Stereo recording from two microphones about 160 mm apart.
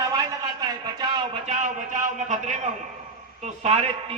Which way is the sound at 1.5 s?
50° right (ahead or behind).